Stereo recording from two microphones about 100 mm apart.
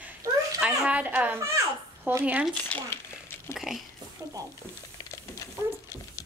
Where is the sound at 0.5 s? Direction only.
10° right (ahead or behind).